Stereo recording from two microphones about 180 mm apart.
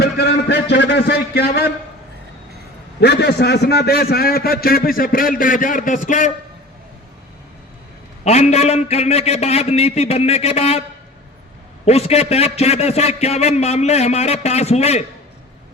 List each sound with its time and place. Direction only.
0.0 s a man's voice: 70° left (ahead or behind)
3.0 s a man's voice: 65° left (ahead or behind); by 6.3 s 45° left (ahead or behind)
8.2 s a man's voice: 40° left (ahead or behind)
11.9 s a man's voice: 35° left (ahead or behind)